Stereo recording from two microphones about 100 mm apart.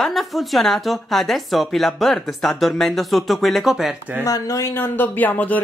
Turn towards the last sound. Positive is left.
turn(degrees=15)  # may be behind; listen again after turning